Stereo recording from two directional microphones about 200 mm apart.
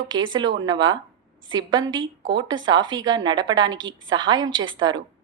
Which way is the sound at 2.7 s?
20° right (ahead or behind).